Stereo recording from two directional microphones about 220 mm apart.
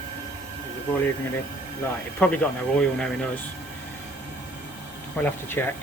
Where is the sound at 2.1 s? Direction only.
5° left (ahead or behind).